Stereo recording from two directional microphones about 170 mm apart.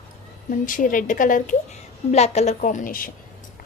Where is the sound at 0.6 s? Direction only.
50° left (ahead or behind).